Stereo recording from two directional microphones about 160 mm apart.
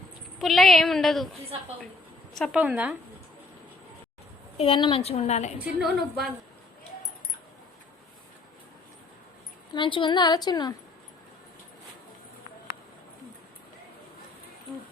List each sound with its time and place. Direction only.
0.3 s a woman's voice: centre (ahead or behind)
4.5 s a woman's voice: 35° left (ahead or behind)
5.8 s a woman's voice: centre (ahead or behind)
9.7 s a woman's voice: 30° left (ahead or behind)